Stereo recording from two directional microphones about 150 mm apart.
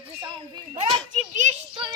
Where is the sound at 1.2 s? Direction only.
50° right (ahead or behind).